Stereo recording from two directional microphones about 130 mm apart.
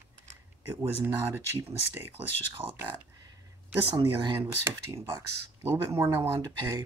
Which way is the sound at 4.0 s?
35° right (ahead or behind).